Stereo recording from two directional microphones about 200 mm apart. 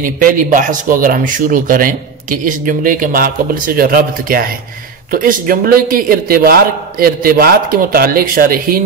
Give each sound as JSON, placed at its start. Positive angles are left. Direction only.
{"t": 0.0, "sound": "speech", "side_deg": -40}